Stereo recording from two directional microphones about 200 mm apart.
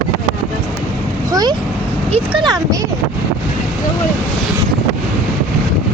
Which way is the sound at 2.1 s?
25° right (ahead or behind).